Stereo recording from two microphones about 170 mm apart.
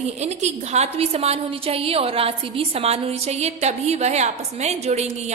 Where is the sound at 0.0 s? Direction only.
40° right (ahead or behind).